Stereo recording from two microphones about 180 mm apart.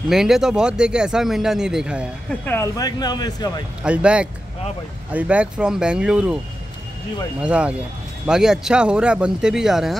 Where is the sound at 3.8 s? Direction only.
5° right (ahead or behind).